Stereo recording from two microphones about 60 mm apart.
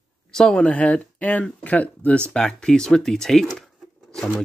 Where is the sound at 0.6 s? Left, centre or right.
Left; by 4.3 s centre.